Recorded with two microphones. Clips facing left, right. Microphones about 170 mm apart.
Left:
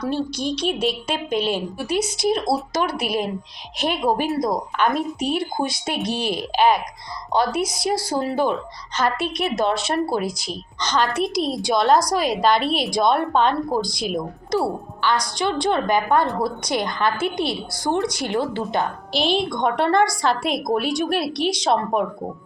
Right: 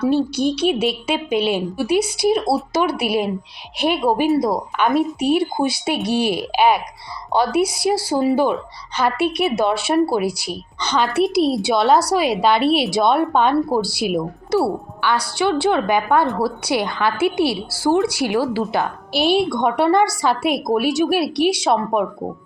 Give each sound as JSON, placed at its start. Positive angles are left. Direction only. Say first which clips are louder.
{"t": 0.0, "sound": "a woman's voice", "louder": "right 6 dB", "side_deg": -5}
{"t": 6.0, "sound": "speech", "louder": "right 5 dB", "side_deg": -60}
{"t": 6.2, "sound": "a woman's voice", "louder": "even", "side_deg": -10}